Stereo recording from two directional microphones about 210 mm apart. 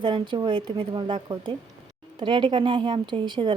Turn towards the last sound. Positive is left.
turn(degrees=-20)  # may be behind; listen again after turning